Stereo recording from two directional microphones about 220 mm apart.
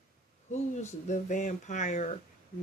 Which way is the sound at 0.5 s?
30° left (ahead or behind).